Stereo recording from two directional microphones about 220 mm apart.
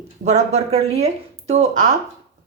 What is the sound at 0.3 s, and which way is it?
A woman's voice, 30° right (ahead or behind).